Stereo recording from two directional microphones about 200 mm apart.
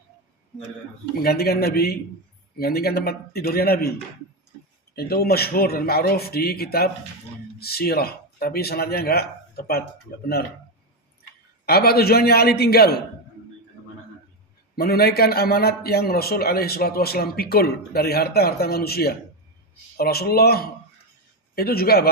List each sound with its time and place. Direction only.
1.2 s a man's voice: 50° left (ahead or behind)
4.9 s a man's voice: 50° left (ahead or behind)
11.6 s a man's voice: 50° left (ahead or behind)
14.8 s a man's voice: 50° left (ahead or behind)